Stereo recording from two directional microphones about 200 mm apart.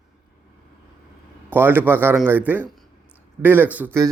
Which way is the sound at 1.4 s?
10° right (ahead or behind).